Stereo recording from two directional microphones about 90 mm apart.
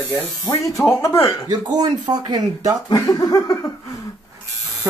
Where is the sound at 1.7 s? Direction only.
50° right (ahead or behind).